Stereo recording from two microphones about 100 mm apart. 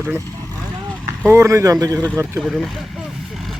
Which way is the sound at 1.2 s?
20° right (ahead or behind).